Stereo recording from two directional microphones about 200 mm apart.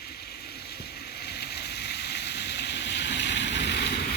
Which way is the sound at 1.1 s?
55° left (ahead or behind).